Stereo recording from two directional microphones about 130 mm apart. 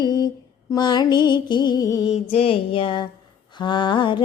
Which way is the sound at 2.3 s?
45° left (ahead or behind).